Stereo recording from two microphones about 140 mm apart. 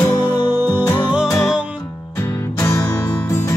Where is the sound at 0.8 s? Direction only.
30° left (ahead or behind).